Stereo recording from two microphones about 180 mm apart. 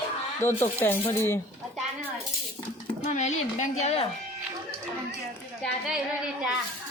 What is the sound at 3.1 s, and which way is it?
Speech, 40° left (ahead or behind).